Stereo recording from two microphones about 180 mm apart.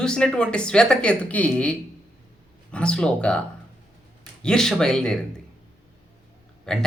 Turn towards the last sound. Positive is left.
turn(degrees=5)  # may be behind; listen again after turning